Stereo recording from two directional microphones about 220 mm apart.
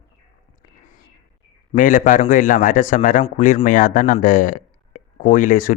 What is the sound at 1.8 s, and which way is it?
A man's voice, 35° left (ahead or behind).